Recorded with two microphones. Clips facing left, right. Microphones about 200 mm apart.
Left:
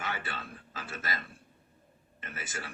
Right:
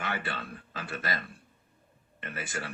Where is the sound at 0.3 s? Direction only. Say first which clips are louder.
Right 4 dB; 60° right (ahead or behind).